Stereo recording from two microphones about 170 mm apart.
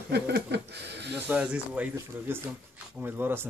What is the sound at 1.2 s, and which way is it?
Speech, 10° right (ahead or behind).